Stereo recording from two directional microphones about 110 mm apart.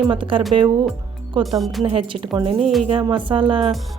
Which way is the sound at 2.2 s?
50° right (ahead or behind).